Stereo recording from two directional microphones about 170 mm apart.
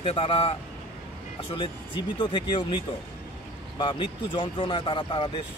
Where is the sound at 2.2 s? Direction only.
30° left (ahead or behind).